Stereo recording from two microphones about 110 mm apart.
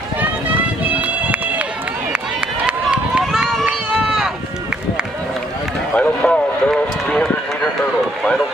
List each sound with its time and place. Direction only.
0.2 s run: 15° right (ahead or behind)
5.9 s run: 10° left (ahead or behind)